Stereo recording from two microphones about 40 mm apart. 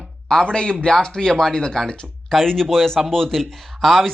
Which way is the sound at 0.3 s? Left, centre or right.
Left.